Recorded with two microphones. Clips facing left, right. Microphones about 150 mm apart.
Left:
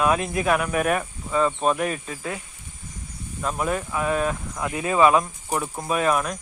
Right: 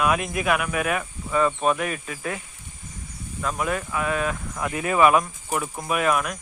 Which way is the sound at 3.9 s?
30° left (ahead or behind).